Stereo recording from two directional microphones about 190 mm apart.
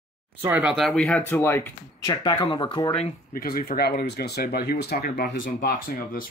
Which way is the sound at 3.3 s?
50° left (ahead or behind).